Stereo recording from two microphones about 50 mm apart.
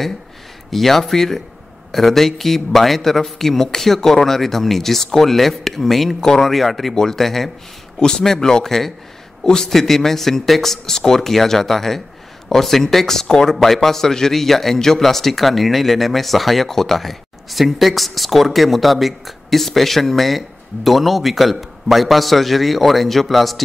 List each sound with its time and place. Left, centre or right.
0.7 s speech: centre